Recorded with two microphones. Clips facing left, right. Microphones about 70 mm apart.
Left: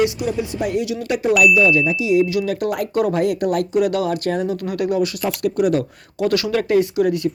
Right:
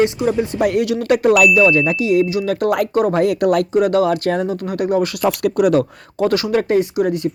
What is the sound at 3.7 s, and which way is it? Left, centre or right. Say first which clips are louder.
Speech: right 4 dB; right.